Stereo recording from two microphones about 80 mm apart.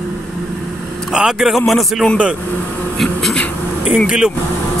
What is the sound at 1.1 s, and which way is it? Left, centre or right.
Speech, centre.